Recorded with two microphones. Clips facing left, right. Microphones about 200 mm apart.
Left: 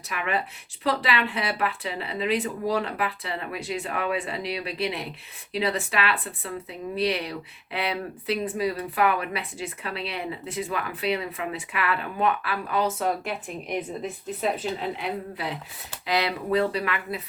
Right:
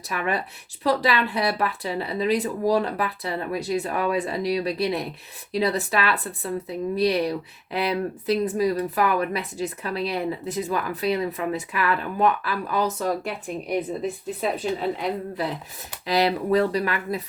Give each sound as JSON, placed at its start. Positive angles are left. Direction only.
{"t": 0.1, "sound": "speech", "side_deg": -40}
{"t": 14.8, "sound": "speech", "side_deg": -40}